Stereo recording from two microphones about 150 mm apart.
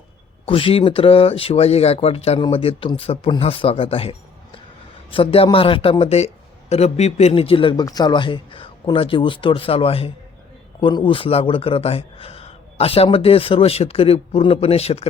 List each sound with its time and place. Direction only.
0.4 s a man's voice: 35° left (ahead or behind)
5.1 s a man's voice: 40° left (ahead or behind)